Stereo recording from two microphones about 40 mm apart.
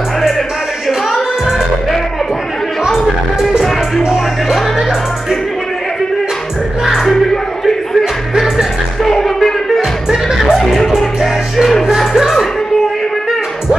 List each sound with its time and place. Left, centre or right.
0.8 s music: centre
2.8 s music: centre
7.0 s music: centre
9.0 s music: centre
9.8 s music: centre
10.5 s music: centre